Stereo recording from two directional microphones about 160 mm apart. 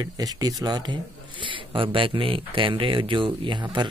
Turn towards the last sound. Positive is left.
turn(degrees=-30)  # may be behind; listen again after turning